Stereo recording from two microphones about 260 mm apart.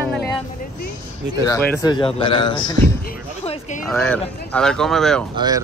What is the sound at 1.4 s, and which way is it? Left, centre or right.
Speech, centre.